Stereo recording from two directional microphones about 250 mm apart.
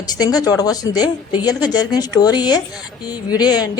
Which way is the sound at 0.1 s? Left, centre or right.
Centre.